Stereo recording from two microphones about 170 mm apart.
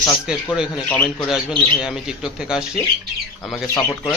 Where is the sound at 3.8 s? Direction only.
20° left (ahead or behind).